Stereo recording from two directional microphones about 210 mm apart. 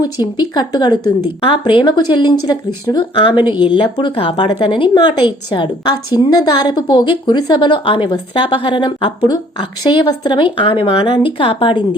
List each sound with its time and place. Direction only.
0.0 s a woman's voice: 20° left (ahead or behind)